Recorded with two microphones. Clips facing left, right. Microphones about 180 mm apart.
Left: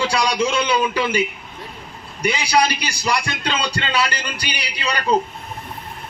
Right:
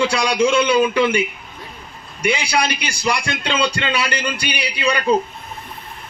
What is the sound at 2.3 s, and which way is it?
Speech, 55° right (ahead or behind).